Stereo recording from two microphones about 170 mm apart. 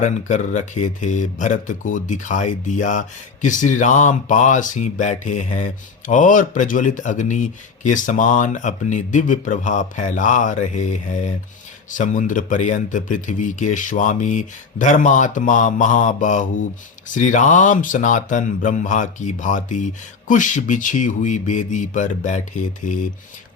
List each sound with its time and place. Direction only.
0.0 s speech: 45° left (ahead or behind)